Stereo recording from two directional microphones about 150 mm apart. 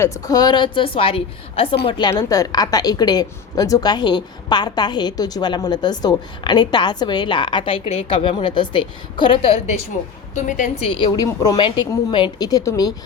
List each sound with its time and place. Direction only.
0.0 s a woman's voice: 20° left (ahead or behind)
10.3 s a woman's voice: 55° left (ahead or behind)
10.8 s a woman's voice: 30° left (ahead or behind)